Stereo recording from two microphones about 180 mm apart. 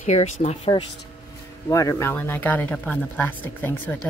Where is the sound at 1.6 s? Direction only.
20° left (ahead or behind).